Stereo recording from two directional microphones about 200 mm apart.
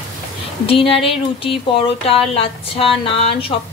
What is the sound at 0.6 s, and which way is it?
Speech, 30° left (ahead or behind).